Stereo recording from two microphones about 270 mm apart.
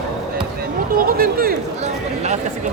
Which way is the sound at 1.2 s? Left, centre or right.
Right.